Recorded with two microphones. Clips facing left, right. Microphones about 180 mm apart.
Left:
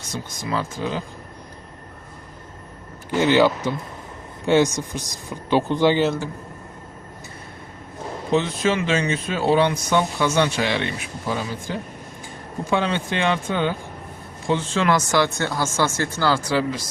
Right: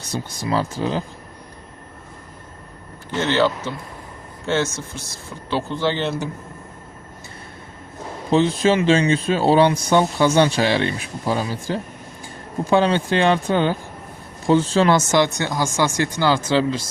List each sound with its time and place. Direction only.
0.0 s speech: 35° right (ahead or behind)
3.1 s speech: 10° left (ahead or behind)
8.3 s speech: 30° right (ahead or behind)
12.7 s speech: 35° right (ahead or behind)